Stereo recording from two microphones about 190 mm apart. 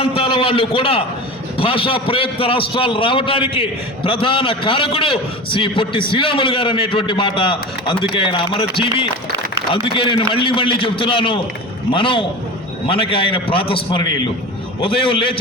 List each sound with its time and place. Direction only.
0.0 s a man's voice: 30° left (ahead or behind)